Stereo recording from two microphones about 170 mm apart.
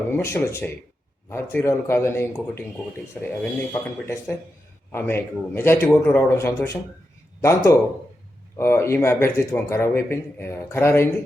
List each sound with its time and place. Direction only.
0.1 s speech: 15° left (ahead or behind)